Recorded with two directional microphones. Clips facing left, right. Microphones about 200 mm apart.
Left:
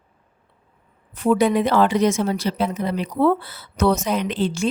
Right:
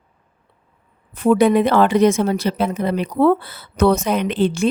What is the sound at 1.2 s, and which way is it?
Speech, 55° right (ahead or behind).